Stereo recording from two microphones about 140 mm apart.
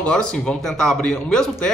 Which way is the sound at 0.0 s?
5° left (ahead or behind).